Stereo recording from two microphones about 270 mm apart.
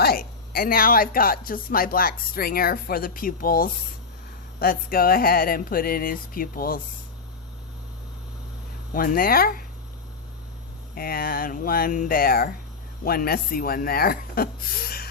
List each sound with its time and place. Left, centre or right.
0.0 s speech: left
8.9 s speech: left
10.9 s speech: left